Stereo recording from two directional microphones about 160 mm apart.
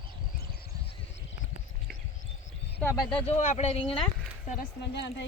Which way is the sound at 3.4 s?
45° left (ahead or behind).